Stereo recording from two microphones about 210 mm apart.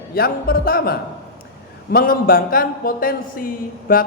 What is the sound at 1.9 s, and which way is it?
A woman's voice, 45° left (ahead or behind).